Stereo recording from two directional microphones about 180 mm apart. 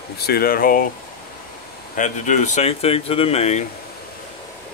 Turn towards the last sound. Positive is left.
turn(degrees=40)  # may be behind; listen again after turning